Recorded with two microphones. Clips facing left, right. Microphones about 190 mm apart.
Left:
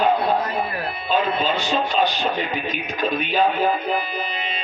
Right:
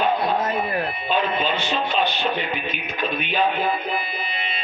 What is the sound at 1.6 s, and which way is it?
Speech, 40° left (ahead or behind).